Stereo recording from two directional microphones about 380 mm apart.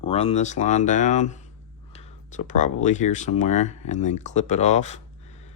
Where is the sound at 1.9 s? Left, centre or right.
Centre.